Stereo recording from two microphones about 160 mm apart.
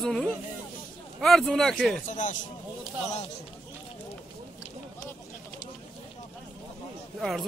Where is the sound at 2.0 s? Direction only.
50° left (ahead or behind).